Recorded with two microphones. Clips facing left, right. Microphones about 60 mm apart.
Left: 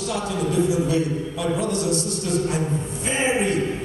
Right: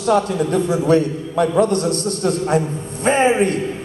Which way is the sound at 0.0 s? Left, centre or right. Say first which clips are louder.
Right 8 dB; right.